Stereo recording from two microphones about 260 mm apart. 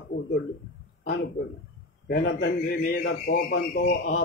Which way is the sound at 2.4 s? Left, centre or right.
Left.